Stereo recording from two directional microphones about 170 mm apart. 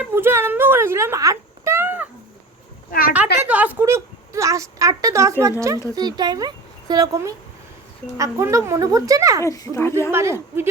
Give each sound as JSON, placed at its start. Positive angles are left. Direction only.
{"t": 0.0, "sound": "a sound", "side_deg": -15}
{"t": 3.2, "sound": "a woman's voice", "side_deg": -5}
{"t": 9.4, "sound": "a child's voice", "side_deg": 15}
{"t": 10.1, "sound": "speech", "side_deg": -15}